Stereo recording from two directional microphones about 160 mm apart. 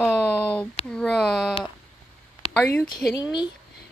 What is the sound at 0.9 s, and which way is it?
Speech, 5° left (ahead or behind).